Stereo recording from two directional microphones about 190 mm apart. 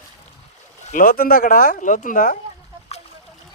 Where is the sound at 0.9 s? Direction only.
45° left (ahead or behind).